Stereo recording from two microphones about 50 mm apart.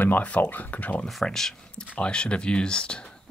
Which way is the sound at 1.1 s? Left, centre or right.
Centre.